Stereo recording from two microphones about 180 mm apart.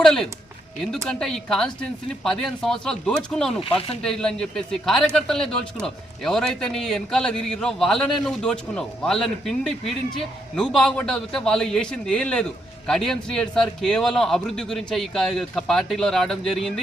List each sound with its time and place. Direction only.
0.0 s a man's voice: centre (ahead or behind)
3.6 s speech: 30° left (ahead or behind)
4.0 s a man's voice: 5° left (ahead or behind)